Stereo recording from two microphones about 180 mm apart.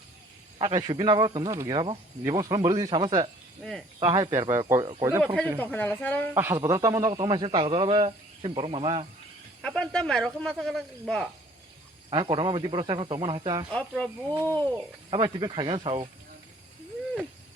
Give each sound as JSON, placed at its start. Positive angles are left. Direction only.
{"t": 0.6, "sound": "speech", "side_deg": -25}
{"t": 3.6, "sound": "speech", "side_deg": 0}
{"t": 4.0, "sound": "speech", "side_deg": -20}
{"t": 5.2, "sound": "speech", "side_deg": 5}
{"t": 6.3, "sound": "speech", "side_deg": -10}
{"t": 9.6, "sound": "speech", "side_deg": 5}
{"t": 12.1, "sound": "speech", "side_deg": -25}
{"t": 13.7, "sound": "speech", "side_deg": 5}
{"t": 15.1, "sound": "speech", "side_deg": -25}